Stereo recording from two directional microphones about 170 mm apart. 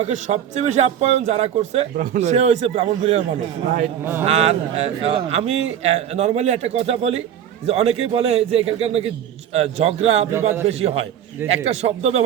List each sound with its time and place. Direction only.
0.0 s a man's voice: 40° right (ahead or behind)
4.0 s a man's voice: 15° right (ahead or behind)
4.3 s a man's voice: 40° right (ahead or behind)